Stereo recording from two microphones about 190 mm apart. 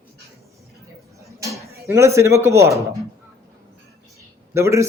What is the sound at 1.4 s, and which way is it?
Speech, 15° right (ahead or behind).